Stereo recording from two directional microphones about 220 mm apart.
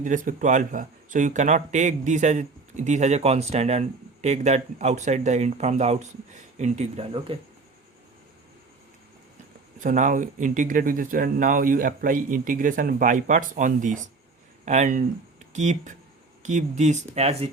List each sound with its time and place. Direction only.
0.0 s speech: 35° right (ahead or behind)
9.8 s speech: 35° right (ahead or behind)